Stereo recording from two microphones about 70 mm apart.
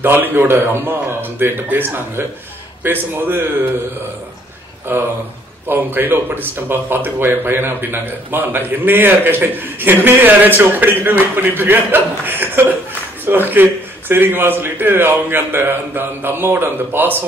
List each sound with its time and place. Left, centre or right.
0.0 s a man's voice: right
4.9 s a man's voice: right